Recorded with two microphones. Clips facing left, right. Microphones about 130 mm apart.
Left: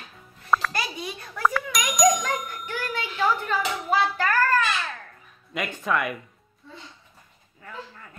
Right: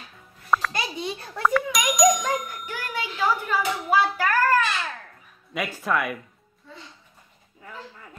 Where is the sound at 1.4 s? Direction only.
Centre (ahead or behind).